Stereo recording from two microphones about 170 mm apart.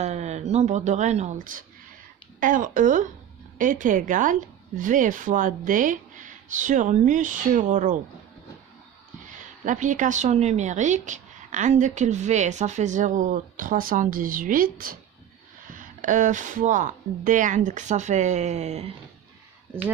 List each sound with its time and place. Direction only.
0.0 s a woman's voice: 40° right (ahead or behind)
9.3 s a woman's voice: 50° right (ahead or behind)